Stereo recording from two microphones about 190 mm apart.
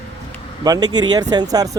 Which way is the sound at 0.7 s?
20° right (ahead or behind).